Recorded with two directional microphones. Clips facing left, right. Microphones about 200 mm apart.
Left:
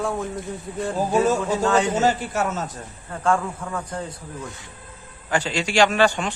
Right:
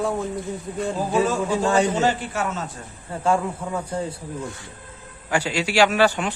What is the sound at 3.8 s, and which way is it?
A man's voice, 10° right (ahead or behind).